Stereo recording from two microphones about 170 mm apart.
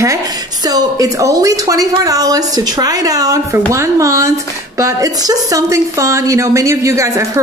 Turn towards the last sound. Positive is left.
turn(degrees=-20)  # may be behind; listen again after turning